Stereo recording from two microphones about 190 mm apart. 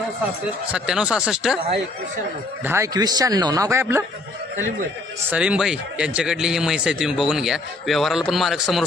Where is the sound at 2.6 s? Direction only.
15° right (ahead or behind).